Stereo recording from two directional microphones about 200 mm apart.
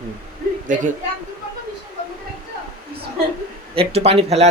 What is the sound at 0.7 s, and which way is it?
Speech, 40° right (ahead or behind).